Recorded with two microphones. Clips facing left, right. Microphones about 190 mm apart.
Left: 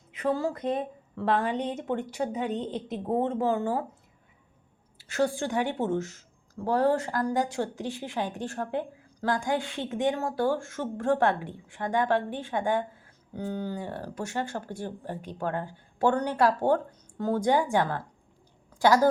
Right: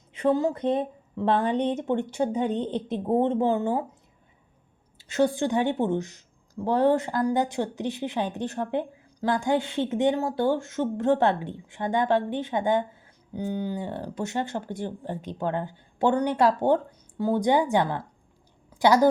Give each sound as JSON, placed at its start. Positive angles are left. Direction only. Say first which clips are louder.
{"t": 0.1, "sound": "speech", "louder": "right 5 dB", "side_deg": -30}
{"t": 5.0, "sound": "speech", "louder": "right 4 dB", "side_deg": -20}